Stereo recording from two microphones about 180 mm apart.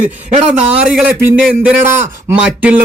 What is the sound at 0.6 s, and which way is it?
A man's voice, 5° right (ahead or behind).